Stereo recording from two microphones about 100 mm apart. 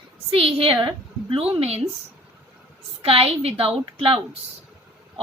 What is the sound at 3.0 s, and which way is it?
A woman's voice, 70° right (ahead or behind).